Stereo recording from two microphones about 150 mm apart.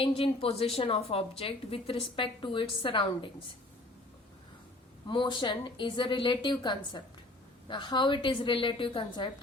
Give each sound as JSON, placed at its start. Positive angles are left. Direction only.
{"t": 0.0, "sound": "a woman's voice", "side_deg": 40}
{"t": 5.0, "sound": "a woman's voice", "side_deg": 30}